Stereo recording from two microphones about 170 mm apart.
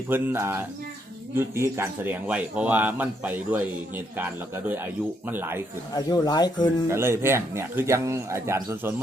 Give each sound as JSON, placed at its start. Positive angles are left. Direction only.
{"t": 0.1, "sound": "speech", "side_deg": -15}
{"t": 5.9, "sound": "speech", "side_deg": 20}
{"t": 6.8, "sound": "speech", "side_deg": -15}